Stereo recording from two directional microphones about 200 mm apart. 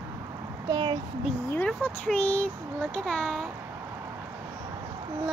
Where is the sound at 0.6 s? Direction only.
25° right (ahead or behind).